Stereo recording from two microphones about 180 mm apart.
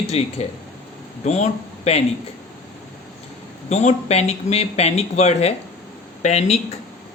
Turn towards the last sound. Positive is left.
turn(degrees=40)  # may be behind; listen again after turning